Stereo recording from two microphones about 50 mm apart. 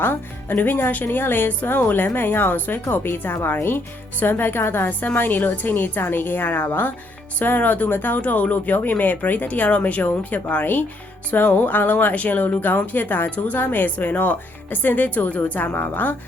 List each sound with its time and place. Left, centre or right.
0.0 s a woman's voice: left